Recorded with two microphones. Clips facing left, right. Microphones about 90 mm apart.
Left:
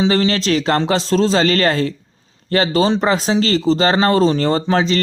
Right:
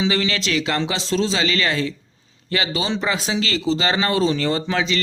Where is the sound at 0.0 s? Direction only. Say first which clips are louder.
Left 6 dB; 40° left (ahead or behind).